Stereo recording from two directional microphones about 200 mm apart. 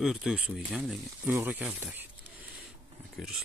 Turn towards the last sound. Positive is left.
turn(degrees=0)  # may be behind; listen again after turning